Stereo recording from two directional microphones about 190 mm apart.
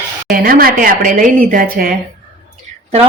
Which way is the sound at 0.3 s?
50° right (ahead or behind).